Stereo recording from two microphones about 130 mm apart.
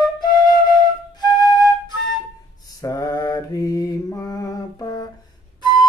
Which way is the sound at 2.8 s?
25° left (ahead or behind).